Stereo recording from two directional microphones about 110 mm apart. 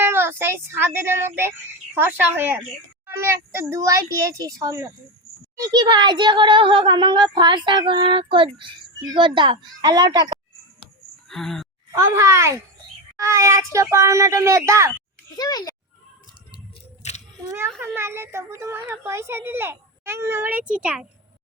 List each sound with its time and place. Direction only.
0.0 s a child's voice: 20° right (ahead or behind); by 10.3 s 40° right (ahead or behind)
11.3 s speech: 5° left (ahead or behind)
11.9 s a child's voice: 30° right (ahead or behind)
15.4 s a child's voice: 35° left (ahead or behind)
17.0 s a sound: 90° left
17.9 s a child's voice: 25° right (ahead or behind)